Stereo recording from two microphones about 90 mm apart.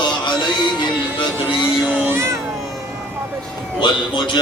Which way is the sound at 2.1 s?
30° right (ahead or behind).